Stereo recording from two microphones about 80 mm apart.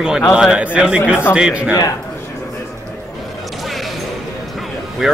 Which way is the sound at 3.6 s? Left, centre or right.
Centre.